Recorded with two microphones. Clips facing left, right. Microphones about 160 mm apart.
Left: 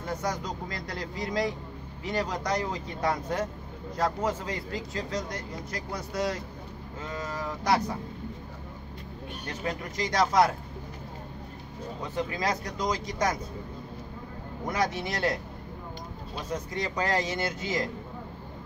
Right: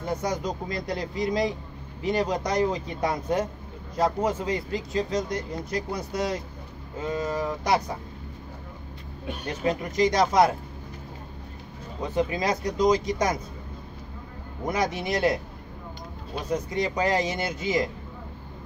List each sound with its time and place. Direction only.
0.0 s speech: 20° right (ahead or behind)
9.5 s speech: 20° right (ahead or behind)
12.0 s speech: 20° right (ahead or behind)
14.7 s speech: 15° right (ahead or behind)
16.7 s speech: 15° right (ahead or behind)